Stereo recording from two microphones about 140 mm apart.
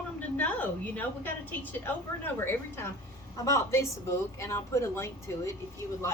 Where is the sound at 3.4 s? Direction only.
20° left (ahead or behind).